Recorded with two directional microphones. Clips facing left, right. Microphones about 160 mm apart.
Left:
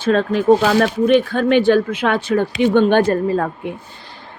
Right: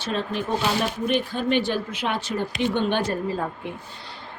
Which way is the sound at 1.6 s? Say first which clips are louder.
Left 11 dB; 55° left (ahead or behind).